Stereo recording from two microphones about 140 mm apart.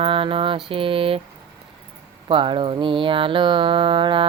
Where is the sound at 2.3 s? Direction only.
35° right (ahead or behind).